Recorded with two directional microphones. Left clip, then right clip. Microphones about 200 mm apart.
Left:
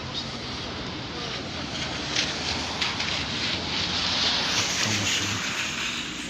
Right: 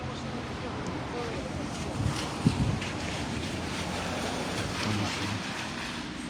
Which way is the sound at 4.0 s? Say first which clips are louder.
Left 11 dB; 50° right (ahead or behind).